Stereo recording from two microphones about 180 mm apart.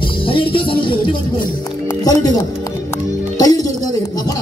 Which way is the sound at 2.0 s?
20° left (ahead or behind).